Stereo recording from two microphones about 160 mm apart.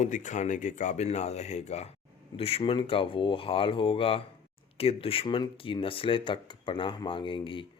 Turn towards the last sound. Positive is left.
turn(degrees=30)  # may be behind; listen again after turning